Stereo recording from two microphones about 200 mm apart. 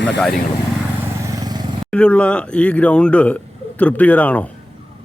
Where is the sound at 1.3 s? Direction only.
20° right (ahead or behind).